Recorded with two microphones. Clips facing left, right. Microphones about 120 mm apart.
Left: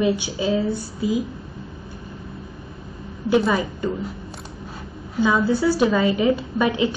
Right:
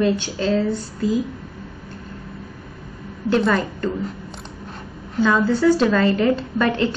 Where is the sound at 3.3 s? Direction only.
10° left (ahead or behind).